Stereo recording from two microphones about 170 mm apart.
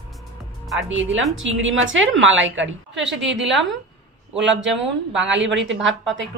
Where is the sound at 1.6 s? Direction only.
90° right.